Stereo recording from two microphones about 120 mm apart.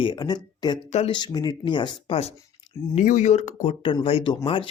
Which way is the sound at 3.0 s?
80° left.